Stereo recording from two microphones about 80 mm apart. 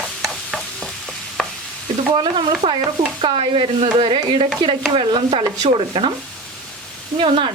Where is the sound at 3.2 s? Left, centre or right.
Right.